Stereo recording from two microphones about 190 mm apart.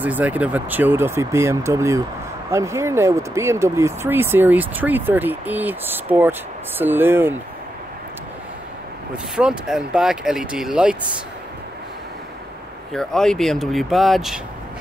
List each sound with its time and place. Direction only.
0.0 s speech: 10° right (ahead or behind)
9.1 s speech: 5° right (ahead or behind)
12.9 s speech: 5° left (ahead or behind)